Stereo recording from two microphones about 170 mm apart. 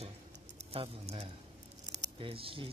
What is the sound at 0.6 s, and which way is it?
Speech, 35° right (ahead or behind).